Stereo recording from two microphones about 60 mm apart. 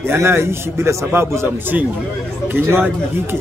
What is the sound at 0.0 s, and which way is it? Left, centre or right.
A man's voice, right.